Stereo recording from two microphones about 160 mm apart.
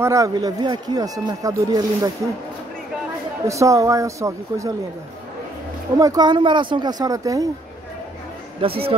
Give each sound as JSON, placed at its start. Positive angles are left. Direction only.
{"t": 0.0, "sound": "speech", "side_deg": -20}
{"t": 3.4, "sound": "speech", "side_deg": -20}
{"t": 5.9, "sound": "speech", "side_deg": -20}
{"t": 8.5, "sound": "speech", "side_deg": -35}